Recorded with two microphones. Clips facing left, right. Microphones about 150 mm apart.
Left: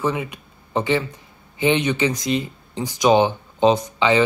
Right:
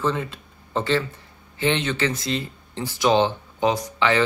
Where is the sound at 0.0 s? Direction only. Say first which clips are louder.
Left 1 dB; 10° left (ahead or behind).